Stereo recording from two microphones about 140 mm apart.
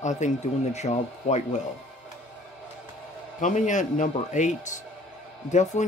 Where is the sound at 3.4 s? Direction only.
60° left (ahead or behind).